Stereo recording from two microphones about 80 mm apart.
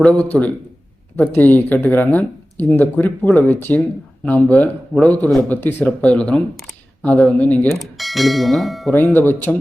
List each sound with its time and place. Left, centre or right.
0.2 s speech: centre
7.7 s speech: centre
9.0 s speech: left